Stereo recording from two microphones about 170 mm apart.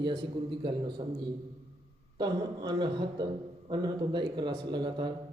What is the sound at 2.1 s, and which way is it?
Speech, 25° right (ahead or behind).